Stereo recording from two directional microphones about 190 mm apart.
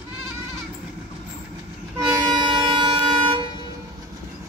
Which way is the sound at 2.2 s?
25° right (ahead or behind).